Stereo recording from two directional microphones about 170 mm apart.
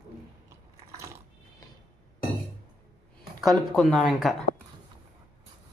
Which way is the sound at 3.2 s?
Centre (ahead or behind).